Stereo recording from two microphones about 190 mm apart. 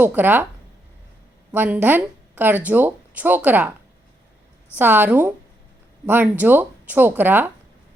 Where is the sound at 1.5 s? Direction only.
10° right (ahead or behind).